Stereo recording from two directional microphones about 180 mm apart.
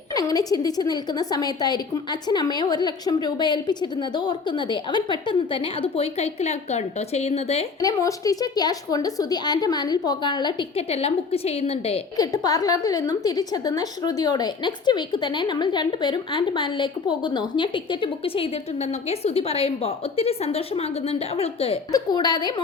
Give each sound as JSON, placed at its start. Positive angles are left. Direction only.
{"t": 0.1, "sound": "a woman's voice", "side_deg": 20}
{"t": 7.8, "sound": "a woman's voice", "side_deg": 20}
{"t": 12.1, "sound": "a woman's voice", "side_deg": 20}